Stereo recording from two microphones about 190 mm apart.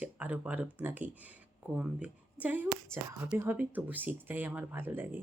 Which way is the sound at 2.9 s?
5° left (ahead or behind).